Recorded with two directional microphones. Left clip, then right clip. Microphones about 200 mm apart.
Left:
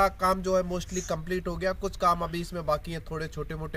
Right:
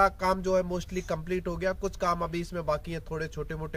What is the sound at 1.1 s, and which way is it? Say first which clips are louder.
Speech: even; 25° right (ahead or behind).